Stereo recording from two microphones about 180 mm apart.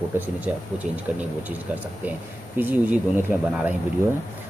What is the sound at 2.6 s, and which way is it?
Speech, 10° right (ahead or behind).